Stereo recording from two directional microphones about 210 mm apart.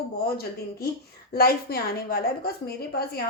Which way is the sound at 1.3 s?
45° left (ahead or behind).